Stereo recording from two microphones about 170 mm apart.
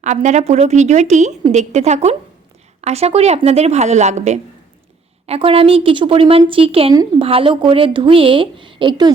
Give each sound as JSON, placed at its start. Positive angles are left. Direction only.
{"t": 0.0, "sound": "a woman's voice", "side_deg": -45}